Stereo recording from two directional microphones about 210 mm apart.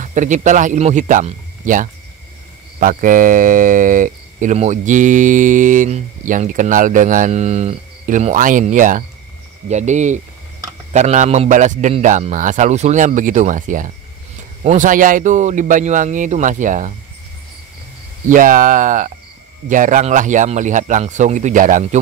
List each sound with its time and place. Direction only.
0.0 s speech: 35° right (ahead or behind)
18.3 s speech: 40° right (ahead or behind)